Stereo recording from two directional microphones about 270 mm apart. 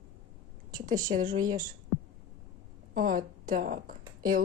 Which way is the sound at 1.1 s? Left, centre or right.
Right.